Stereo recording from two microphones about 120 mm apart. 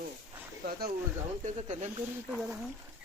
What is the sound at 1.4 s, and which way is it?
Speech, 70° right (ahead or behind).